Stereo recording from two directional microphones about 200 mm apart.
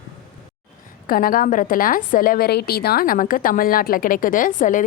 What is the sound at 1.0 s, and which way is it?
A woman's voice, 45° left (ahead or behind).